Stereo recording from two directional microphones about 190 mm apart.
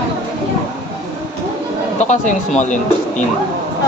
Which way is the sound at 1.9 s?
40° left (ahead or behind).